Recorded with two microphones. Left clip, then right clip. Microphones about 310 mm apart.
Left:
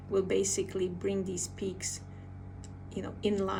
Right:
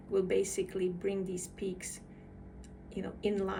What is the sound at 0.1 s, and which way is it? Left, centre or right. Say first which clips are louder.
A woman's voice: left 1 dB; left.